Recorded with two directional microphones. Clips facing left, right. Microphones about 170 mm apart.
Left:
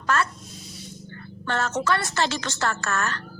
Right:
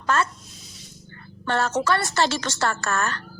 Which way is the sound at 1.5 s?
35° right (ahead or behind).